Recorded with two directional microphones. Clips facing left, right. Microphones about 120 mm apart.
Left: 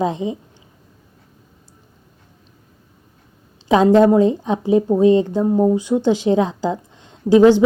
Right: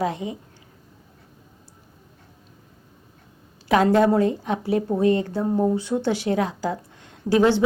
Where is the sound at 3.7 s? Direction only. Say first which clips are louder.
Left 5 dB; 20° left (ahead or behind).